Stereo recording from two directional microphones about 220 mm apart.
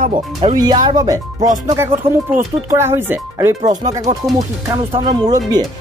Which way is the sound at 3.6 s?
30° right (ahead or behind).